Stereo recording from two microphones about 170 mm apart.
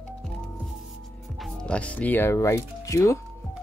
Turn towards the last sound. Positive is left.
turn(degrees=15)  # may be behind; listen again after turning